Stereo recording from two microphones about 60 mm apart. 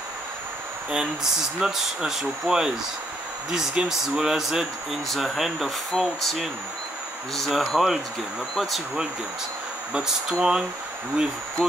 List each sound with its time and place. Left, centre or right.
0.9 s speech: centre
10.3 s speech: centre